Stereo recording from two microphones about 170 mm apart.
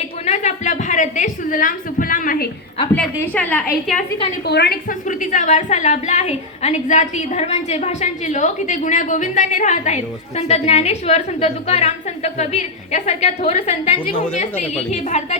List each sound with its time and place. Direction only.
0.3 s a woman's voice: 45° left (ahead or behind)
3.2 s a woman's voice: 10° left (ahead or behind)
4.4 s a woman's voice: 75° left (ahead or behind); by 15.4 s 40° left (ahead or behind)